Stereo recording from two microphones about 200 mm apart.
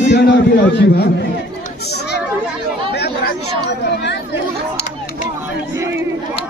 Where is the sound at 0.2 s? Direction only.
55° left (ahead or behind).